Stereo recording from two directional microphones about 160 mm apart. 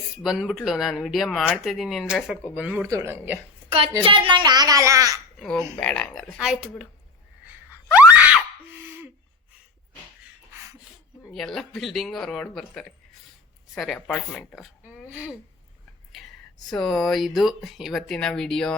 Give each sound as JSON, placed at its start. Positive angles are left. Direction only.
{"t": 0.2, "sound": "speech", "side_deg": -5}
{"t": 3.7, "sound": "a child's voice", "side_deg": -35}
{"t": 5.4, "sound": "speech", "side_deg": 5}
{"t": 7.9, "sound": "screaming", "side_deg": -10}
{"t": 10.5, "sound": "a sound", "side_deg": -15}
{"t": 11.3, "sound": "speech", "side_deg": 0}
{"t": 16.1, "sound": "a sound", "side_deg": 0}
{"t": 16.6, "sound": "speech", "side_deg": 0}